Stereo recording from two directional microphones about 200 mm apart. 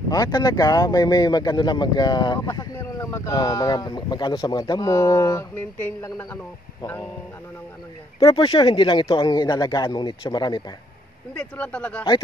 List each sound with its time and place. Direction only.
0.1 s speech: 20° left (ahead or behind)
8.2 s speech: 20° left (ahead or behind)
11.3 s speech: 5° left (ahead or behind)